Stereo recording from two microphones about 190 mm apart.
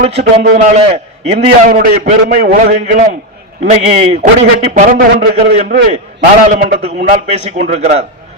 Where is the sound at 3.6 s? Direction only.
35° right (ahead or behind).